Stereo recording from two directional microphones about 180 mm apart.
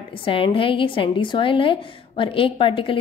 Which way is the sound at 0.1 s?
30° left (ahead or behind).